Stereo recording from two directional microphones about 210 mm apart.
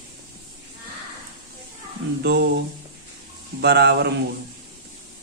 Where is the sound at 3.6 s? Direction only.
50° right (ahead or behind).